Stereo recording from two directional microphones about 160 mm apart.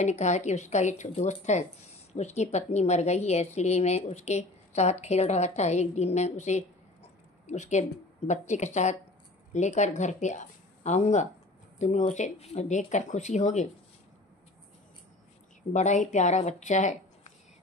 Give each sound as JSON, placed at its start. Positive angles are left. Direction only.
{"t": 0.0, "sound": "a woman's voice", "side_deg": 45}
{"t": 15.7, "sound": "a woman's voice", "side_deg": 50}